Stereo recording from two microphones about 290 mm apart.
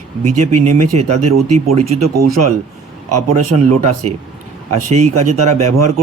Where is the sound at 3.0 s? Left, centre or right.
Right.